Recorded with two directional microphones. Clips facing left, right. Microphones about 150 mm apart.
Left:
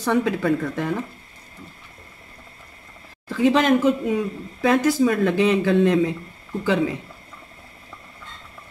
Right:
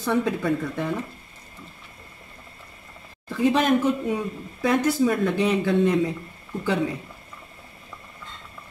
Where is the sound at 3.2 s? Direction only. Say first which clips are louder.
Left 3 dB; 90° left.